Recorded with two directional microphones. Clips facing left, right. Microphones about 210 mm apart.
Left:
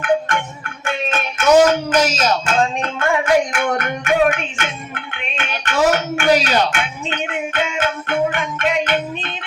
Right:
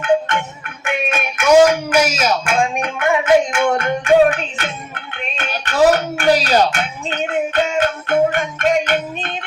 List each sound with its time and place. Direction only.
0.0 s music: 20° right (ahead or behind); by 9.3 s 45° right (ahead or behind)